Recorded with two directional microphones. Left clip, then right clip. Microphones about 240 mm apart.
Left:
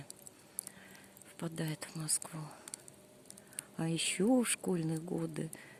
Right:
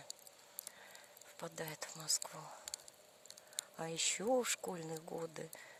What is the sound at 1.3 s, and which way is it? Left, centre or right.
Speech, centre.